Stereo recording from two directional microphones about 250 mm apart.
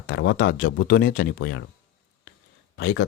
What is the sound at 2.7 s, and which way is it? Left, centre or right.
Speech, left.